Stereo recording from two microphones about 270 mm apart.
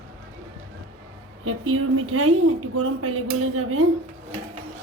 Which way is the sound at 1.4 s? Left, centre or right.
Right.